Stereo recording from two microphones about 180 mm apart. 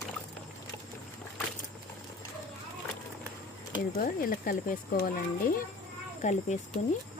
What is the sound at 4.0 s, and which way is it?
Speech, 50° left (ahead or behind).